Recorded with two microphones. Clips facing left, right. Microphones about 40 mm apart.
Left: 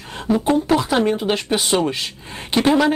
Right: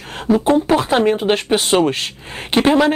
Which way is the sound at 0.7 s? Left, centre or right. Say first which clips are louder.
Right 3 dB; right.